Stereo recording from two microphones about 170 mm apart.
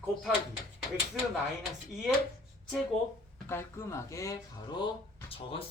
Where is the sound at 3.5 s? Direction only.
15° left (ahead or behind).